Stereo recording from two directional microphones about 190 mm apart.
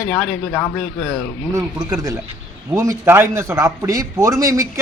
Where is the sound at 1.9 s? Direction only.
20° right (ahead or behind).